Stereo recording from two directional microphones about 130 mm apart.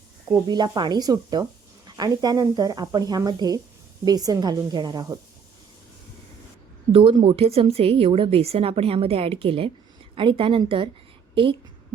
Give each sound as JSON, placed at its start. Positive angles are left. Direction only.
{"t": 0.4, "sound": "speech", "side_deg": -35}
{"t": 6.9, "sound": "a woman's voice", "side_deg": -40}